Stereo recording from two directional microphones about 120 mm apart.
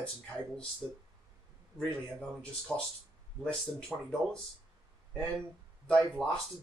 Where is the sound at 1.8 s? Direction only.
5° left (ahead or behind).